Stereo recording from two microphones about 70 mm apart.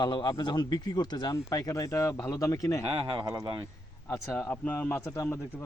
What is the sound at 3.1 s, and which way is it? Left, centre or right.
Speech, right.